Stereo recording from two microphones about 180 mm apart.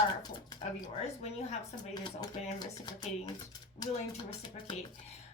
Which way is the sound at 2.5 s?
25° left (ahead or behind).